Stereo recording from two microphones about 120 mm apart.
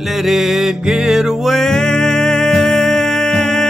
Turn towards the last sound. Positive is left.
turn(degrees=5)  # may be behind; listen again after turning